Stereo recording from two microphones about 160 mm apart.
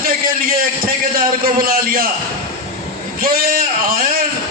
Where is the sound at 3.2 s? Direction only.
65° right (ahead or behind).